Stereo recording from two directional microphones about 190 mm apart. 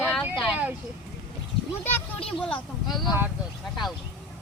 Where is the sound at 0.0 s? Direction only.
5° right (ahead or behind).